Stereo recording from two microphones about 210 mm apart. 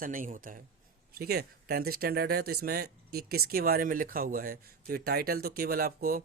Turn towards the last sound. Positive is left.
turn(degrees=-45)  # may be behind; listen again after turning